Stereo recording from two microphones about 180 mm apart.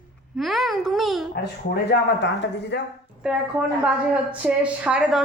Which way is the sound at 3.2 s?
5° right (ahead or behind).